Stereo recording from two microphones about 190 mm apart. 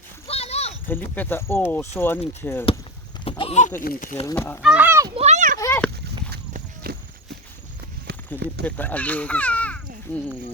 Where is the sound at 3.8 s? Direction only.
45° left (ahead or behind).